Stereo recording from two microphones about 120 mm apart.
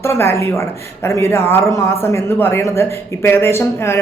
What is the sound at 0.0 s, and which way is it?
A man's voice, 20° left (ahead or behind).